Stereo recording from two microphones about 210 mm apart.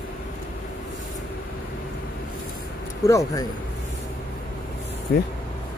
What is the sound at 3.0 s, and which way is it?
Speech, 15° left (ahead or behind).